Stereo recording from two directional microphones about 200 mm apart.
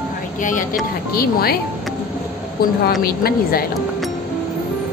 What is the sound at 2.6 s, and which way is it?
Speech, 50° left (ahead or behind).